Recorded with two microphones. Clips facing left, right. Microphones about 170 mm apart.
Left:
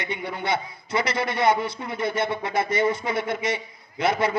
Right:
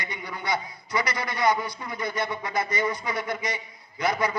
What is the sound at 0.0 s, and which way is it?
A man's voice, 25° left (ahead or behind).